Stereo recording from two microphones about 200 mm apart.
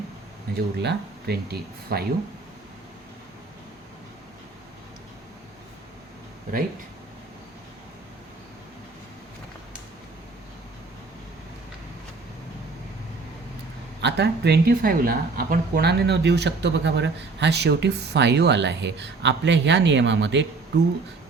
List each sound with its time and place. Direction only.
0.5 s speech: 55° right (ahead or behind)
14.0 s speech: 55° right (ahead or behind)